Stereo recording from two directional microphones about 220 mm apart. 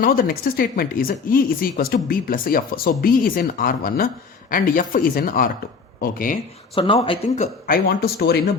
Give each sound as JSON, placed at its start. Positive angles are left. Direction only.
{"t": 0.0, "sound": "speech", "side_deg": 40}
{"t": 6.7, "sound": "speech", "side_deg": 25}